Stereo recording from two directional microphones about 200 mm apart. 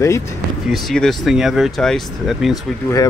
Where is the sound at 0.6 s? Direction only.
Centre (ahead or behind).